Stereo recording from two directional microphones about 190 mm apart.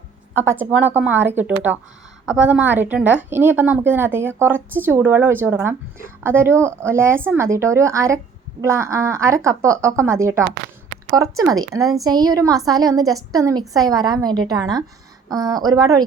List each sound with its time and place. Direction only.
0.3 s a woman's voice: 10° right (ahead or behind)